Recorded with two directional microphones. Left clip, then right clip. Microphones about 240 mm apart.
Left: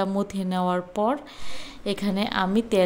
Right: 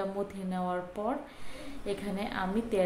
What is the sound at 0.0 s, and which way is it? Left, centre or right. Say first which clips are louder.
A woman's voice: left 8 dB; left.